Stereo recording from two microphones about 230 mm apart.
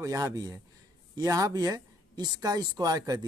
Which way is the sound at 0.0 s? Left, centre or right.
Centre.